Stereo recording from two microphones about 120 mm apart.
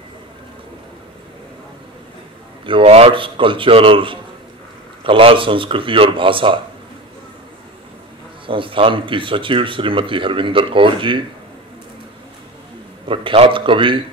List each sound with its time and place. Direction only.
2.6 s speech: 50° right (ahead or behind)
8.5 s speech: 45° right (ahead or behind)
13.1 s speech: 50° right (ahead or behind)